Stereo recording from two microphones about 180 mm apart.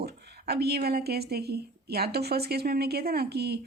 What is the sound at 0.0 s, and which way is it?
Speech, 65° right (ahead or behind).